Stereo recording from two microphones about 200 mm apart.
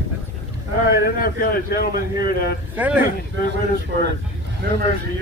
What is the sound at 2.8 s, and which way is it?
Speech, 10° right (ahead or behind).